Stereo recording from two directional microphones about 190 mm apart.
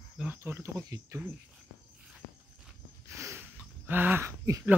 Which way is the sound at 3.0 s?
15° right (ahead or behind).